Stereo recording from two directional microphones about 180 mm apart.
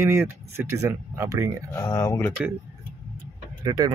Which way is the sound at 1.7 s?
15° left (ahead or behind).